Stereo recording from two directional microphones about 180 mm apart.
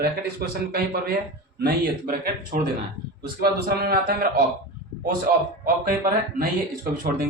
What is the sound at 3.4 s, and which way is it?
A man's voice, 60° right (ahead or behind).